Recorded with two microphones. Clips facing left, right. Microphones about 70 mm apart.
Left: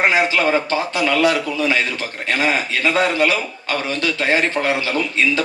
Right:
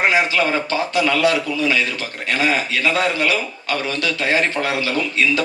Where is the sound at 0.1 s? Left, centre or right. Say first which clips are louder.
Left 1 dB; left.